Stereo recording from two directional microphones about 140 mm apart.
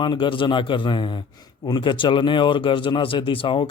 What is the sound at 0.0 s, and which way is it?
Speech, 35° left (ahead or behind).